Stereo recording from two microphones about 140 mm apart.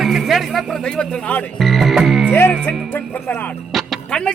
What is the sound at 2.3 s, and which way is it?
Speech, 15° left (ahead or behind).